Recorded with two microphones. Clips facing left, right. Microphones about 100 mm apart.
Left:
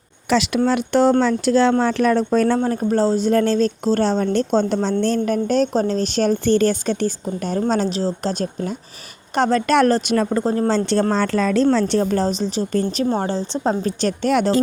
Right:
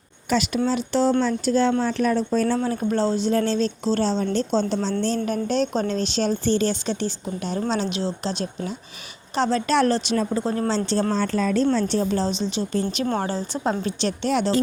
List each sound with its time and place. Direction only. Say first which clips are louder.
0.3 s speech: left 4 dB; 90° left
0.6 s speech: left 6 dB; 60° left (ahead or behind)
1.2 s speech: left 4 dB; 80° left; by 2.6 s 65° left (ahead or behind)
2.6 s speech: left 4 dB; 40° left (ahead or behind)
10.4 s speech: left 5 dB; 35° left (ahead or behind)
10.7 s speech: left 5 dB; 55° left (ahead or behind)
11.1 s speech: left 4 dB; 85° left; by 13.1 s 45° left (ahead or behind)
13.1 s a woman's voice: left 3 dB; 30° left (ahead or behind)
13.8 s speech: left 4 dB; 45° left (ahead or behind)